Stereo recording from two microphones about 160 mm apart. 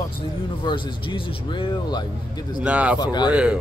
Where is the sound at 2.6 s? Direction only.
10° right (ahead or behind).